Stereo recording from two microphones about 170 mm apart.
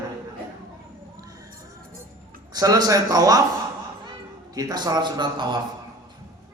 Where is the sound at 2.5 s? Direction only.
20° right (ahead or behind).